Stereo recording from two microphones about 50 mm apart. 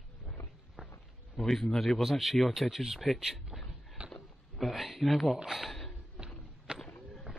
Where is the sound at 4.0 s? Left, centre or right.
Right.